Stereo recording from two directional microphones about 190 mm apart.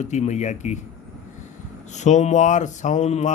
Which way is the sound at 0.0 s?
40° left (ahead or behind).